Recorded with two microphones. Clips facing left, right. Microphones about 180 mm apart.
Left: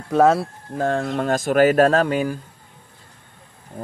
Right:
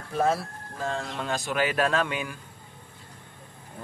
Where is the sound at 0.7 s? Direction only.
60° left (ahead or behind); by 2.3 s 40° left (ahead or behind).